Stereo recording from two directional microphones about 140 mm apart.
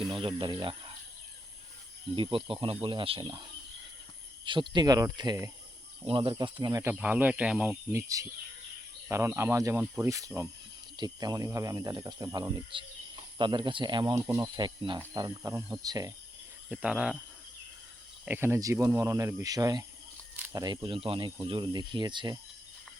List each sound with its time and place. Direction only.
0.1 s speech: 40° right (ahead or behind)
2.1 s speech: 40° right (ahead or behind)
6.9 s speech: 10° right (ahead or behind)
7.9 s speech: 25° right (ahead or behind)
14.2 s speech: 25° right (ahead or behind)
16.6 s speech: 5° right (ahead or behind)
18.3 s speech: 15° right (ahead or behind); by 22.4 s 35° right (ahead or behind)